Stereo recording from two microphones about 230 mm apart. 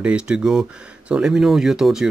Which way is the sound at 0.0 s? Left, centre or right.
Centre.